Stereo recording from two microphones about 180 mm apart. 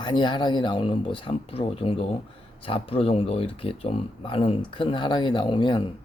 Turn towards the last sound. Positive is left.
turn(degrees=25)  # may be behind; listen again after turning